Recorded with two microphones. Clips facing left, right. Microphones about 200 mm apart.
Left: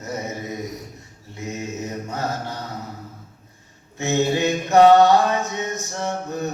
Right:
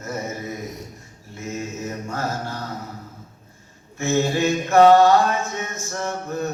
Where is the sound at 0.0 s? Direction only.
20° left (ahead or behind).